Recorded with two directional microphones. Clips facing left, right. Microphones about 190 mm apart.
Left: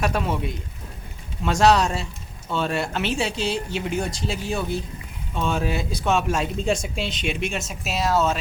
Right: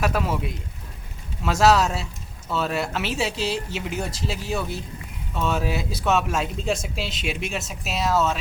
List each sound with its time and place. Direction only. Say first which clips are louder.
0.0 s speech: even; centre (ahead or behind)